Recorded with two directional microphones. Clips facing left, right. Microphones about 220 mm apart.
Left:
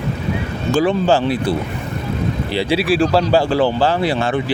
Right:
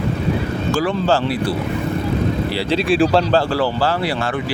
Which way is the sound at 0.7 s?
20° left (ahead or behind).